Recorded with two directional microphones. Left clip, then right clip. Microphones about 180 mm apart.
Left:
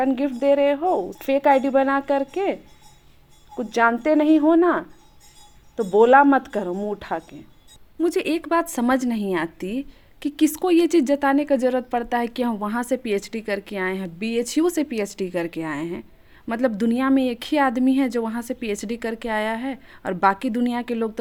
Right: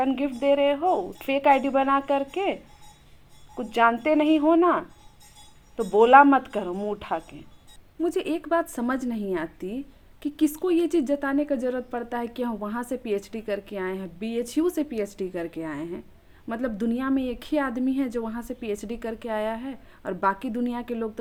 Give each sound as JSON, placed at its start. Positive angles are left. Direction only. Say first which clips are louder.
{"t": 0.0, "sound": "speech", "louder": "left 3 dB", "side_deg": 25}
{"t": 8.0, "sound": "a woman's voice", "louder": "left 4 dB", "side_deg": 45}